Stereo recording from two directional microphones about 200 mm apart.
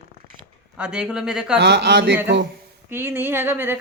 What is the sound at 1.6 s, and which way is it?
Speech, 60° right (ahead or behind).